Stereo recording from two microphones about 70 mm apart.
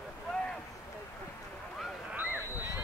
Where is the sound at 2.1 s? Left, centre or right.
Right.